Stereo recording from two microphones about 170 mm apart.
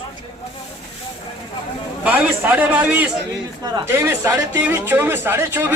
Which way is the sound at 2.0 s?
10° right (ahead or behind).